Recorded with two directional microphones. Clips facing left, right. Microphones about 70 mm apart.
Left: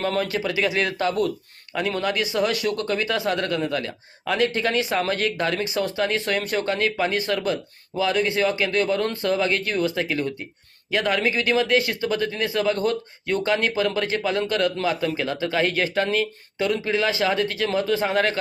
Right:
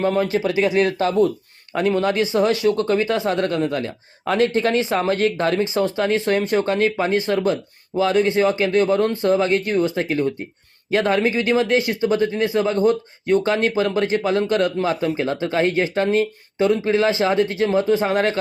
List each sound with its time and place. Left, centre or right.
0.0 s speech: right